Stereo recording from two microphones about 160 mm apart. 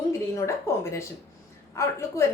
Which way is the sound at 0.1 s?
20° left (ahead or behind).